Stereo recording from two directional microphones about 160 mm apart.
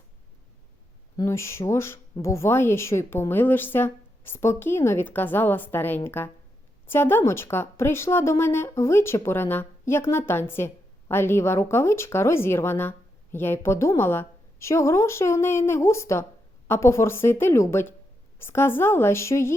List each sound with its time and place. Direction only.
1.1 s speech: 20° left (ahead or behind)